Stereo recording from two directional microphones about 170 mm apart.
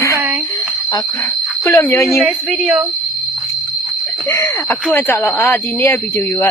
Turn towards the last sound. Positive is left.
turn(degrees=15)  # may be behind; listen again after turning